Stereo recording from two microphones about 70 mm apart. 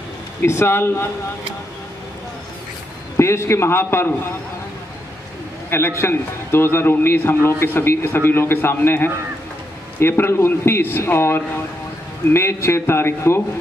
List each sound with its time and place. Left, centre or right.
0.5 s a man's voice: left
3.2 s a man's voice: left
5.7 s a man's voice: left